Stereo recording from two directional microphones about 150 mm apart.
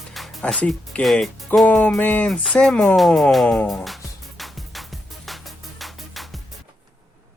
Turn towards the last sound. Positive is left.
turn(degrees=0)  # may be behind; listen again after turning